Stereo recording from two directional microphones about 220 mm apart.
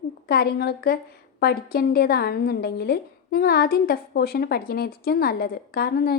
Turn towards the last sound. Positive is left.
turn(degrees=40)  # may be behind; listen again after turning